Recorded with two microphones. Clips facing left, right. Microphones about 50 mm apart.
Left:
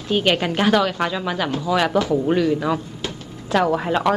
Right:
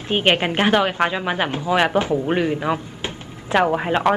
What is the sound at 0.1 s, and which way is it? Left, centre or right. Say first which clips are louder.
A woman's voice: right 1 dB; right.